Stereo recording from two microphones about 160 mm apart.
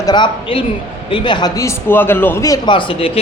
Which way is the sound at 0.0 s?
25° left (ahead or behind).